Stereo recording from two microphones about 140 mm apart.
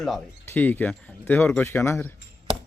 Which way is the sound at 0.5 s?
15° left (ahead or behind).